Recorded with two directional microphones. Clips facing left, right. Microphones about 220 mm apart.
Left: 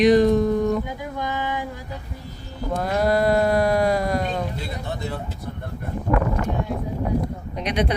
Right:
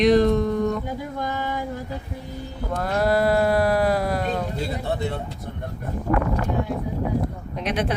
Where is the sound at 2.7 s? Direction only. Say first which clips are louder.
Left 1 dB; centre (ahead or behind).